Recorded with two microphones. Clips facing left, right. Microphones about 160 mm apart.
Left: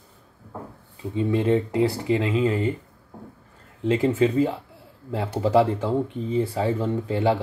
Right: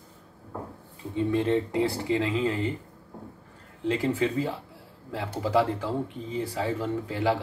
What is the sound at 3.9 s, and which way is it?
Speech, 20° left (ahead or behind).